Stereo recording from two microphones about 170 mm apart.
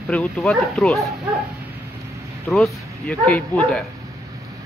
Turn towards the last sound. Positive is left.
turn(degrees=5)  # may be behind; listen again after turning